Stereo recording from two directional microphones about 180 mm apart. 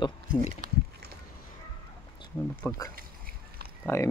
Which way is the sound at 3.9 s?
15° left (ahead or behind).